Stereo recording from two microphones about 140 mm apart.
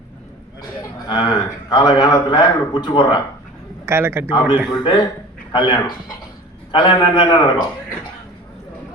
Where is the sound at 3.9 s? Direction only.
20° right (ahead or behind).